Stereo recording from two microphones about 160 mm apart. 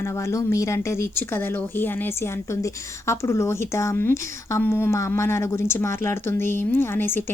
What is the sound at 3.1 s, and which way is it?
Speech, 15° left (ahead or behind).